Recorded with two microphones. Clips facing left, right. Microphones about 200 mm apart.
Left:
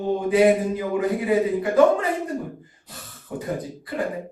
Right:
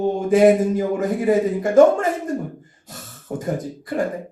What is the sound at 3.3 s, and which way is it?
Speech, 45° right (ahead or behind).